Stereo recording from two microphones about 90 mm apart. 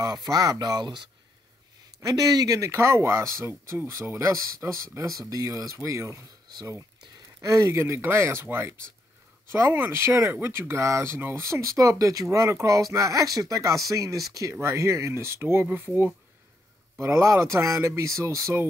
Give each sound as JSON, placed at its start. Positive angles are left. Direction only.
{"t": 0.0, "sound": "speech", "side_deg": -45}
{"t": 17.2, "sound": "speech", "side_deg": -30}